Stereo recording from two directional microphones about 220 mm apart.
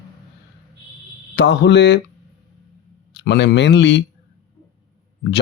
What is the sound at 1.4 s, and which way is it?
Speech, 50° left (ahead or behind).